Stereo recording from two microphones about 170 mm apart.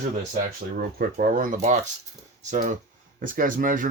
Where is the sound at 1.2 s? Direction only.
55° right (ahead or behind).